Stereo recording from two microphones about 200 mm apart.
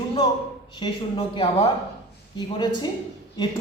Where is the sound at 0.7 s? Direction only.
25° left (ahead or behind).